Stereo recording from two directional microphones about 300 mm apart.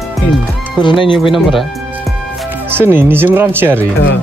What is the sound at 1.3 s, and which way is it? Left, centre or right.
Speech, centre.